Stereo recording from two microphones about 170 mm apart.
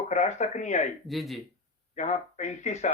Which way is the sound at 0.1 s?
45° left (ahead or behind).